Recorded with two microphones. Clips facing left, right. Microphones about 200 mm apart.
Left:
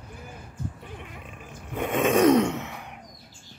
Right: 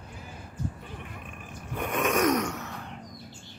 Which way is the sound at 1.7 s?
25° left (ahead or behind).